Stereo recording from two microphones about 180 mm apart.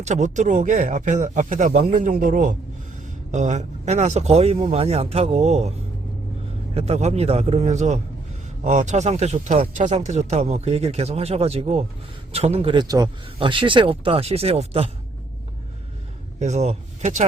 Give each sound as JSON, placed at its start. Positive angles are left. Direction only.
{"t": 0.0, "sound": "speech", "side_deg": -40}
{"t": 6.7, "sound": "speech", "side_deg": -35}
{"t": 16.4, "sound": "speech", "side_deg": -40}